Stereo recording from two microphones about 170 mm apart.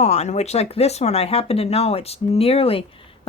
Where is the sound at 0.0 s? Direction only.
40° left (ahead or behind).